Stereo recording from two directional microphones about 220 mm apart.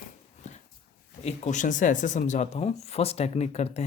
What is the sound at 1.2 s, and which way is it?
Speech, 30° left (ahead or behind).